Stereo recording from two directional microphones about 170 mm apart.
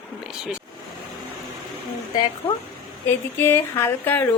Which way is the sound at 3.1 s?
15° left (ahead or behind).